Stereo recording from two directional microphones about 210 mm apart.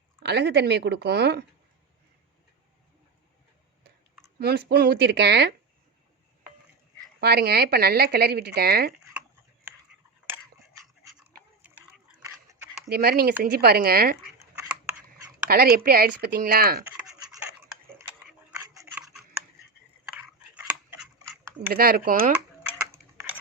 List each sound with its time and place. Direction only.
0.2 s speech: 50° right (ahead or behind)
4.4 s speech: 50° right (ahead or behind)
7.2 s speech: 50° right (ahead or behind)
9.7 s a sound: 10° right (ahead or behind)
12.9 s speech: 50° right (ahead or behind)
15.4 s speech: 45° right (ahead or behind)
17.9 s cutlery: 10° right (ahead or behind)
20.9 s a sound: 10° right (ahead or behind)
21.7 s speech: 45° right (ahead or behind)